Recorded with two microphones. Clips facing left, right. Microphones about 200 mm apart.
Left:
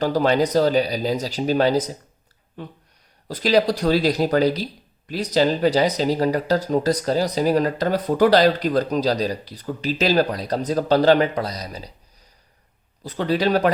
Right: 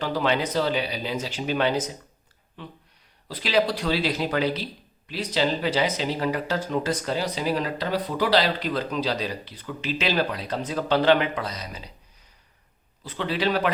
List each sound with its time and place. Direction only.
0.0 s speech: 40° left (ahead or behind)
13.0 s speech: 40° left (ahead or behind)